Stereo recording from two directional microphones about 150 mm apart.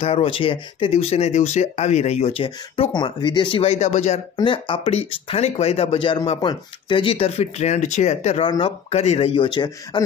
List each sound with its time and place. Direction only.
0.0 s speech: 40° left (ahead or behind)
4.4 s speech: 35° left (ahead or behind)
8.5 s speech: 35° left (ahead or behind)